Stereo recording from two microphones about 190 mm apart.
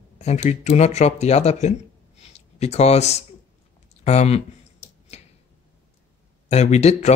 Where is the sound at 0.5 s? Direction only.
35° left (ahead or behind).